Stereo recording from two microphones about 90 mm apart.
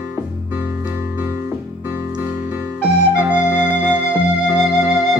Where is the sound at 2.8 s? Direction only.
15° right (ahead or behind).